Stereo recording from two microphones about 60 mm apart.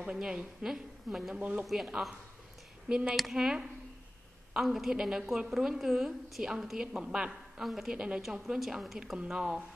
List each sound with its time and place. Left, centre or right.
0.0 s a woman's voice: centre
2.9 s a woman's voice: centre